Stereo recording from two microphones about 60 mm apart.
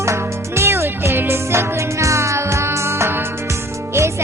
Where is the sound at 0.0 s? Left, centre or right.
Right.